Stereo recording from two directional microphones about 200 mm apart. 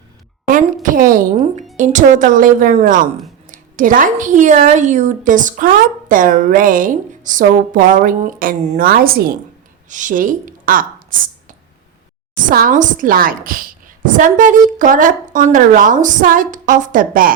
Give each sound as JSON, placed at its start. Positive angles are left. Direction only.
{"t": 0.5, "sound": "a woman's voice", "side_deg": -40}